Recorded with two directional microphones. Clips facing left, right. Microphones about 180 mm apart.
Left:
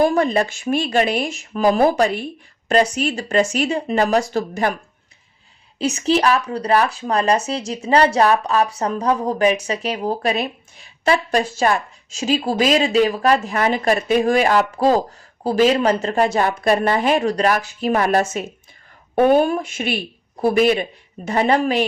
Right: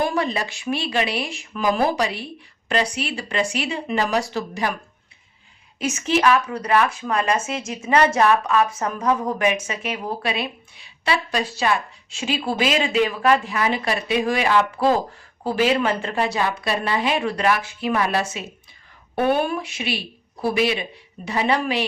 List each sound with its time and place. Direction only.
0.0 s speech: 45° left (ahead or behind)
5.8 s speech: 35° left (ahead or behind)